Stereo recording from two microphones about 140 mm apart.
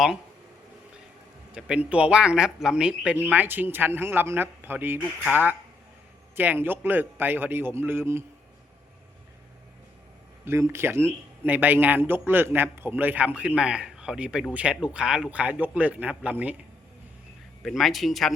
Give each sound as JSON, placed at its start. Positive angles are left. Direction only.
{"t": 1.5, "sound": "speech", "side_deg": -5}
{"t": 10.4, "sound": "speech", "side_deg": -20}
{"t": 17.6, "sound": "speech", "side_deg": 0}